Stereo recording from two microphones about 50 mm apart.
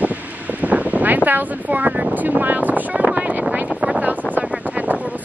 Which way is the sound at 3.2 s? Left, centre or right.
Right.